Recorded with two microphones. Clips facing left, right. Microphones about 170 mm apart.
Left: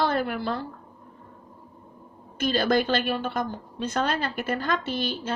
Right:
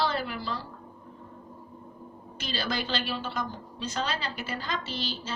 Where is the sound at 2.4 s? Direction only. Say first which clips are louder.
Left 10 dB; 50° left (ahead or behind).